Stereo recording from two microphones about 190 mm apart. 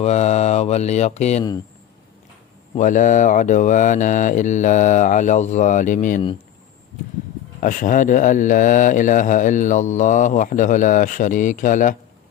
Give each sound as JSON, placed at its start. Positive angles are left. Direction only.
{"t": 0.0, "sound": "speech", "side_deg": 35}
{"t": 2.7, "sound": "speech", "side_deg": 40}
{"t": 7.6, "sound": "speech", "side_deg": 45}